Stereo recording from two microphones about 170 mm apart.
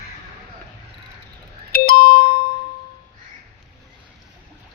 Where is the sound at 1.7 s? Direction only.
60° left (ahead or behind).